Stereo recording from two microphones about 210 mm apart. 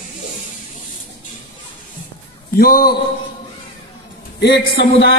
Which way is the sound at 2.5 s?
45° left (ahead or behind).